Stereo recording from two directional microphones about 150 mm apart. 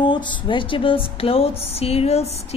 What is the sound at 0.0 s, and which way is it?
A woman's voice, 30° left (ahead or behind).